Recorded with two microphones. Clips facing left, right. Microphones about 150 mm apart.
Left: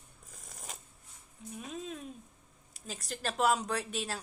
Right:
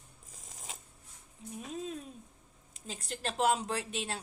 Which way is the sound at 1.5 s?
30° right (ahead or behind).